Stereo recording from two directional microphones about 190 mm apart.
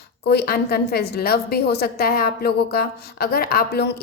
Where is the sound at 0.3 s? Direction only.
55° left (ahead or behind).